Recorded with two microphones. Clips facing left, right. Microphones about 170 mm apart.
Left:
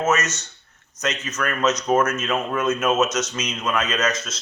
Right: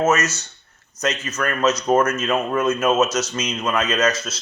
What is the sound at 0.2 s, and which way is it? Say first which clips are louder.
Speech: right 3 dB; 35° right (ahead or behind).